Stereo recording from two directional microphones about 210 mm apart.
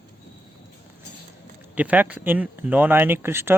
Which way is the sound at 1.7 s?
5° right (ahead or behind).